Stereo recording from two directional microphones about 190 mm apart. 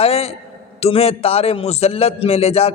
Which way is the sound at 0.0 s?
30° left (ahead or behind).